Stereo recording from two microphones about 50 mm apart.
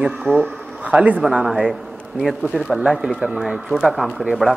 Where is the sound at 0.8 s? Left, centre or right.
Right.